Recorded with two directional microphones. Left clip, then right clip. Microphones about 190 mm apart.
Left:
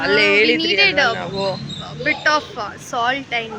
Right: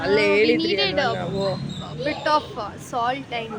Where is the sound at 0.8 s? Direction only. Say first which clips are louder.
Left 7 dB; 15° left (ahead or behind).